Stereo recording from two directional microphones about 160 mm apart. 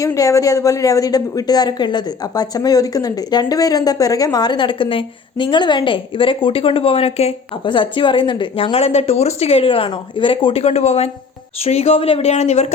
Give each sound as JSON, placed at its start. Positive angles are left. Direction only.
{"t": 0.0, "sound": "speech", "side_deg": 20}